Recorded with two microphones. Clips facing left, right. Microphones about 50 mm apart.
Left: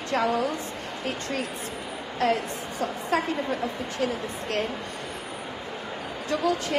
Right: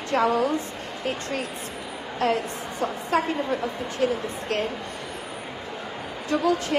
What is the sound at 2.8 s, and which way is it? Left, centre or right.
A woman's voice, right.